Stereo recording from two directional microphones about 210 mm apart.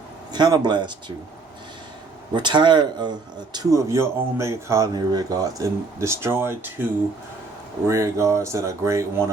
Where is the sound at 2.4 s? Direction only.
20° right (ahead or behind).